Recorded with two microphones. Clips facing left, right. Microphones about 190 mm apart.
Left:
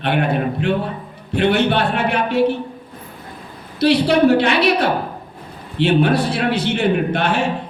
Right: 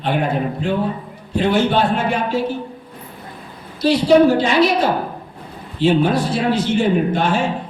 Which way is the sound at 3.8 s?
65° left (ahead or behind).